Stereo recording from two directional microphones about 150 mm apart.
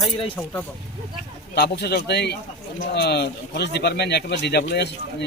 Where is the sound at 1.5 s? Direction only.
90° left.